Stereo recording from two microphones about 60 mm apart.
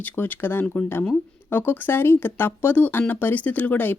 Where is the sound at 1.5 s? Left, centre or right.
Left.